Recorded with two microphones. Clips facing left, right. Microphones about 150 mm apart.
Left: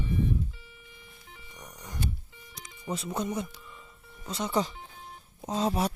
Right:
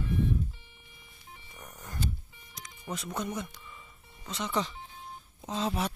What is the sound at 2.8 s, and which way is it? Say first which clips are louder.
Speech: left 3 dB; 30° left (ahead or behind).